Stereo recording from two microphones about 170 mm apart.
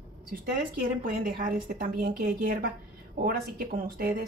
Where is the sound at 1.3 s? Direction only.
55° right (ahead or behind).